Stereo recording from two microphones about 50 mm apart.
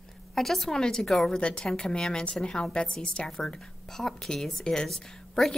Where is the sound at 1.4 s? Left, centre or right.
Centre.